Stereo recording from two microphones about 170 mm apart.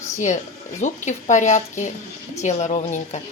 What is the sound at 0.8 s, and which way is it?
A woman's voice, 45° left (ahead or behind).